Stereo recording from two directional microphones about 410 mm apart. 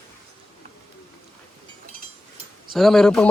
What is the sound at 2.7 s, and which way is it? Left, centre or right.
Speech, centre.